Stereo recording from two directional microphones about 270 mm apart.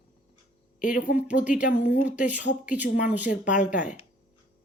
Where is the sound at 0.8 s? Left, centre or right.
Left.